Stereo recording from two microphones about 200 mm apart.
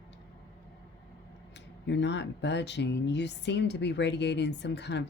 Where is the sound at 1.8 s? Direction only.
60° left (ahead or behind).